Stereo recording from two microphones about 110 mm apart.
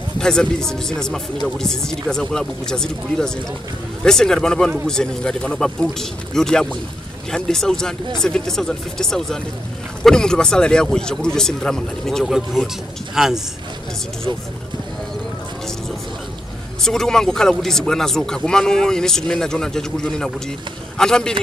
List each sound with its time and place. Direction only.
0.2 s speech: 5° left (ahead or behind)
16.8 s speech: 5° left (ahead or behind)